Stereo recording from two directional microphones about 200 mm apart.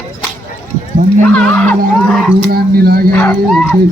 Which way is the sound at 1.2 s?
5° left (ahead or behind).